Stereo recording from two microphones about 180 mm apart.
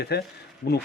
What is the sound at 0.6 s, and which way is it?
Speech, 55° left (ahead or behind).